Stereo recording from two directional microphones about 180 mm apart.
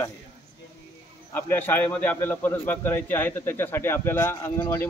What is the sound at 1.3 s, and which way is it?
A man's voice, 10° left (ahead or behind).